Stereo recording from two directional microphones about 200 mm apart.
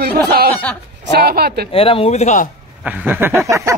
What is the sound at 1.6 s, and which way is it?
Speech, 30° left (ahead or behind).